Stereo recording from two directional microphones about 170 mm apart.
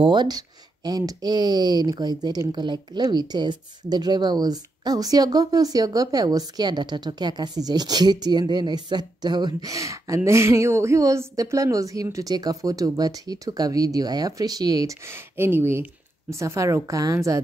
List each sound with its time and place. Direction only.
0.0 s speech: 25° right (ahead or behind)